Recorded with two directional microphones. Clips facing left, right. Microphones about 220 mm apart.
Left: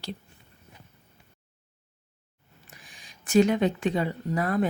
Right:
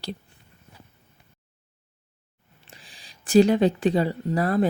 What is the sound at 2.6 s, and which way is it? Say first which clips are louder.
Speech: right 2 dB; 30° right (ahead or behind).